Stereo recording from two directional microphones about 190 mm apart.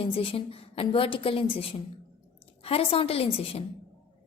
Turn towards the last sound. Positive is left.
turn(degrees=30)  # may be behind; listen again after turning